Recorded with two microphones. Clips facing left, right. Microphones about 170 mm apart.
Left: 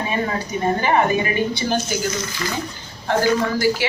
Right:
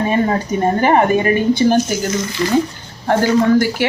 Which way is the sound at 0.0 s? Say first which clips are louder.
Right 7 dB; 40° right (ahead or behind).